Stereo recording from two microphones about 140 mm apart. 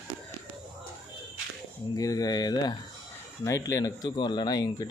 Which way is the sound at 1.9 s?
25° left (ahead or behind).